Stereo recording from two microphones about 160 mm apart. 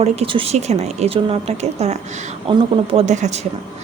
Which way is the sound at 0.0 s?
35° right (ahead or behind).